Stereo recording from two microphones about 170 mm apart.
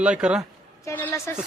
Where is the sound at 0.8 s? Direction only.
15° left (ahead or behind).